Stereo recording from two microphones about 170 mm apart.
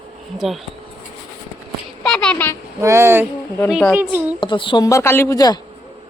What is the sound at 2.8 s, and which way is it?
Speech, 15° right (ahead or behind).